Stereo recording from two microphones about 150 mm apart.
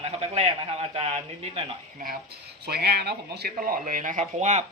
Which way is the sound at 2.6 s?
90° right.